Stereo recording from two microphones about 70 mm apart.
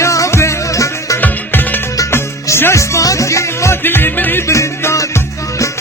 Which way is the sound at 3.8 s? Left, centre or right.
Left.